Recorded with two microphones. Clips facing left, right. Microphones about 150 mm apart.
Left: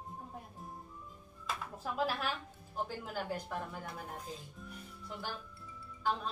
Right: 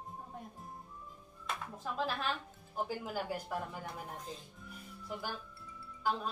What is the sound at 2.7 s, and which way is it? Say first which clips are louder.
Speech: right 2 dB; 5° right (ahead or behind).